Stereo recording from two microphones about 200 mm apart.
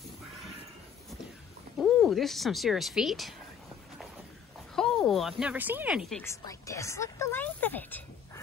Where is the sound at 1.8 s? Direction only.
Centre (ahead or behind).